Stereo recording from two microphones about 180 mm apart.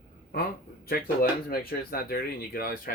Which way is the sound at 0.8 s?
55° left (ahead or behind).